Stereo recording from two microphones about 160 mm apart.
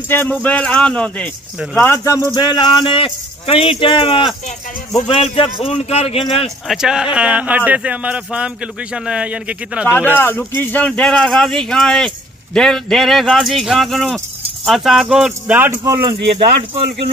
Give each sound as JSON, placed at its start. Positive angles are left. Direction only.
{"t": 0.1, "sound": "speech", "side_deg": 10}
{"t": 1.8, "sound": "speech", "side_deg": 20}
{"t": 6.7, "sound": "speech", "side_deg": -5}
{"t": 9.8, "sound": "speech", "side_deg": 10}